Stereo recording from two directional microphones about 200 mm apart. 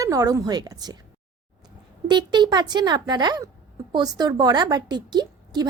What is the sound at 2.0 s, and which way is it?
A woman's voice, 20° right (ahead or behind).